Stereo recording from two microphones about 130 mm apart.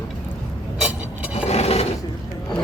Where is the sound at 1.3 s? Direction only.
55° left (ahead or behind).